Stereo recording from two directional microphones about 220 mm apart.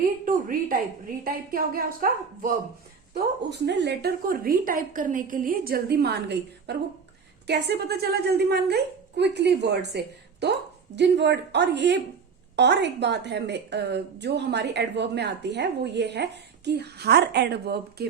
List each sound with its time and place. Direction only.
0.3 s a woman's voice: 40° right (ahead or behind)
3.5 s a woman's voice: 50° right (ahead or behind)